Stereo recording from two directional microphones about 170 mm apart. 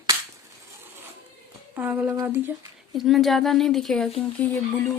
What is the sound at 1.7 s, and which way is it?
Speech, 10° right (ahead or behind).